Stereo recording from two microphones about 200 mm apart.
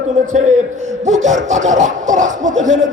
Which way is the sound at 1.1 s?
35° right (ahead or behind).